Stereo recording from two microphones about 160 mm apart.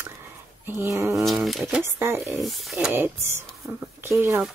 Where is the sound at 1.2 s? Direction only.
Centre (ahead or behind).